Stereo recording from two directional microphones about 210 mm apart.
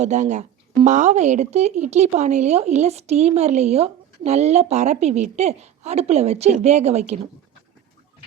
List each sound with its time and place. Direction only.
0.0 s speech: 35° right (ahead or behind)